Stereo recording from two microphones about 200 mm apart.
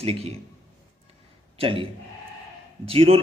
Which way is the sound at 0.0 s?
30° right (ahead or behind).